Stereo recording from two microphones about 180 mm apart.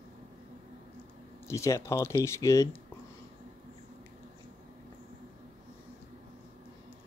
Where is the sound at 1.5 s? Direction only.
15° left (ahead or behind).